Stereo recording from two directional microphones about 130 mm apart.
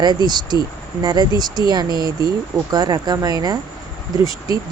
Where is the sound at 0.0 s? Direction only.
35° right (ahead or behind).